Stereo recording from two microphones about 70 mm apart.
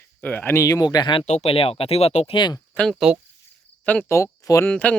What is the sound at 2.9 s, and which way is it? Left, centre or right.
Speech, centre.